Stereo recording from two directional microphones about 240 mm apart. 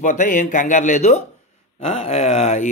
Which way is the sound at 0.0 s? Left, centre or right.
Left.